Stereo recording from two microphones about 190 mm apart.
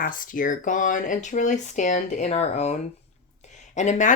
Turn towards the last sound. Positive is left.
turn(degrees=40)  # may be behind; listen again after turning